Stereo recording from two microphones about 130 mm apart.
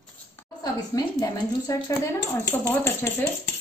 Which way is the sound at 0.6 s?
25° left (ahead or behind).